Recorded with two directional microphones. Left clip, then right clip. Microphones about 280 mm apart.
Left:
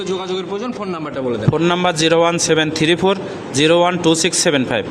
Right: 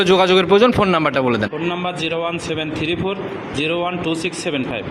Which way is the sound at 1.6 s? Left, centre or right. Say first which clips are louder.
Left 7 dB; left.